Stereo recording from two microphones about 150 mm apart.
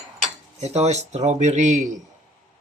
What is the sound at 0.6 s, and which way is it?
Speech, 45° right (ahead or behind).